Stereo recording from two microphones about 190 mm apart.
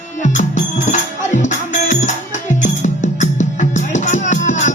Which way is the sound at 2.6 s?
40° left (ahead or behind).